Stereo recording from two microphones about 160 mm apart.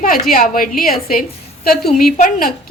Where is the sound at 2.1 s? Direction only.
55° left (ahead or behind).